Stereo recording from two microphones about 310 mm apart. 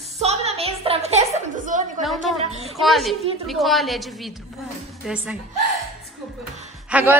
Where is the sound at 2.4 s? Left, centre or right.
Centre.